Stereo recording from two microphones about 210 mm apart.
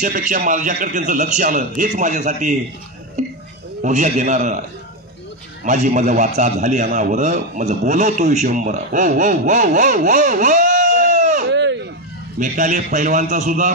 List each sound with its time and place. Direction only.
0.0 s a man's voice: 40° right (ahead or behind)
3.8 s a man's voice: 35° right (ahead or behind)
11.5 s a sound: 55° right (ahead or behind)
12.4 s a man's voice: 40° right (ahead or behind)